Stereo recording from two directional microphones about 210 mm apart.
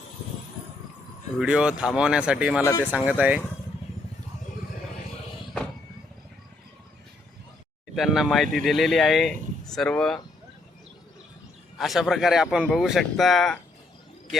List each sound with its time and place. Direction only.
1.4 s speech: 5° right (ahead or behind)
7.9 s speech: centre (ahead or behind)
11.8 s speech: centre (ahead or behind)